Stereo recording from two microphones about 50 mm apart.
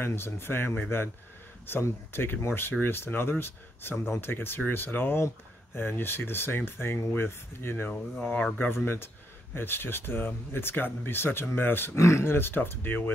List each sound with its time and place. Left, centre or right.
0.0 s speech: left
7.9 s speech: left
8.7 s speech: left
12.0 s speech: left